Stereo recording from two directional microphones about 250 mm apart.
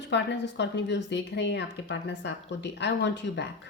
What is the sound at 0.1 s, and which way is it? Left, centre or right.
A woman's voice, left.